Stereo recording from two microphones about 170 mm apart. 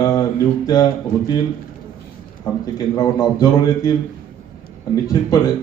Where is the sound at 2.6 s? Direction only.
20° left (ahead or behind).